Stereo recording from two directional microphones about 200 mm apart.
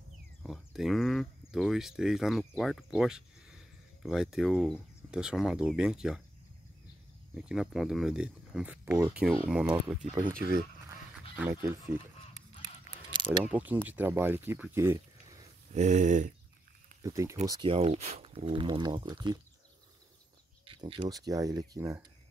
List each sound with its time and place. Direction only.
0.4 s speech: centre (ahead or behind)
7.4 s speech: centre (ahead or behind)
11.3 s speech: 15° right (ahead or behind)
12.6 s a sound: 25° right (ahead or behind)
13.5 s speech: 10° right (ahead or behind)
15.7 s a sound: 35° right (ahead or behind)
17.0 s speech: 15° right (ahead or behind)
20.6 s speech: 25° right (ahead or behind)